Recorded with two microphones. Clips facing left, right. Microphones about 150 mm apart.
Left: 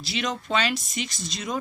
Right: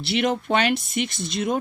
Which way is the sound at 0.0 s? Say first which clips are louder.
Right 7 dB; 60° right (ahead or behind).